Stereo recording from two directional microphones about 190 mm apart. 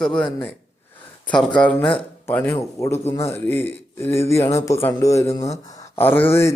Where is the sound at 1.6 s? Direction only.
5° left (ahead or behind).